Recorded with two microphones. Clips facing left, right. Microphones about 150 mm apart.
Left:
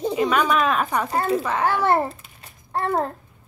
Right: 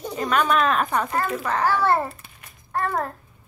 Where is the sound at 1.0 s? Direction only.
30° left (ahead or behind).